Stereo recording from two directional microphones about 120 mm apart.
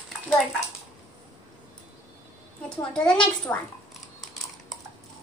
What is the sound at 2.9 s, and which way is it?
Speech, 10° left (ahead or behind).